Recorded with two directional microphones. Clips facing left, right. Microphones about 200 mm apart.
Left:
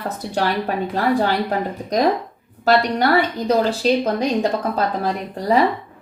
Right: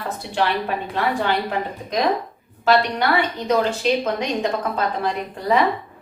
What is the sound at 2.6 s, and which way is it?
A woman's voice, 40° left (ahead or behind).